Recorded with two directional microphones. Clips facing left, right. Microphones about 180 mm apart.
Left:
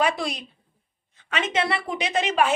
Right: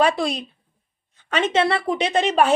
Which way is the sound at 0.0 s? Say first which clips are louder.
Right 5 dB; 25° right (ahead or behind).